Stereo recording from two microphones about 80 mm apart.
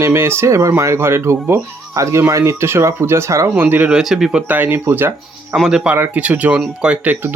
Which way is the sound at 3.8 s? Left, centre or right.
Centre.